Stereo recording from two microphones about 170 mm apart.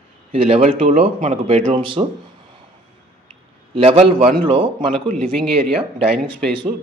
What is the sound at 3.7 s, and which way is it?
Speech, 35° right (ahead or behind).